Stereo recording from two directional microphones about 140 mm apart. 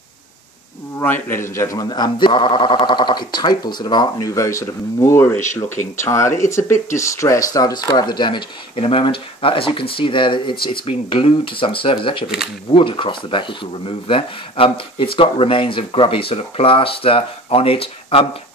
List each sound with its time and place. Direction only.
0.9 s speech: 15° left (ahead or behind); by 18.2 s 40° left (ahead or behind)